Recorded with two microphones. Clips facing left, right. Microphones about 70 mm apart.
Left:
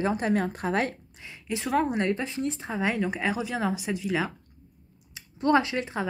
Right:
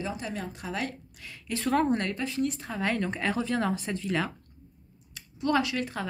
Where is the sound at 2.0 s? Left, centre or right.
Left; by 4.3 s centre.